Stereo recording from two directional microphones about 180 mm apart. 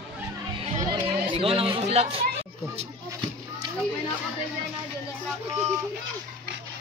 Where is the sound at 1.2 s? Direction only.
30° right (ahead or behind).